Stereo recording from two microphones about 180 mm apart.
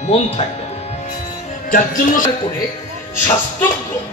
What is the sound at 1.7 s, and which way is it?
Speech, 45° left (ahead or behind).